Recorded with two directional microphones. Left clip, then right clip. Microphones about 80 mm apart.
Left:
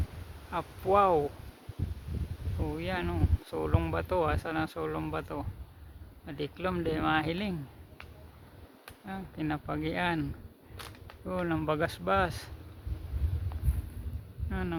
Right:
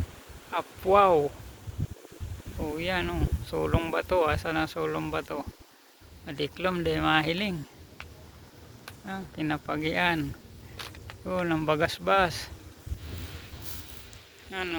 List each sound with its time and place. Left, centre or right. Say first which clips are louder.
0.5 s speech: right 4 dB; centre
2.6 s speech: right 5 dB; centre
9.0 s speech: right 4 dB; centre
10.8 s a sound: right 5 dB; centre
11.3 s speech: right 4 dB; centre
14.5 s speech: right 4 dB; centre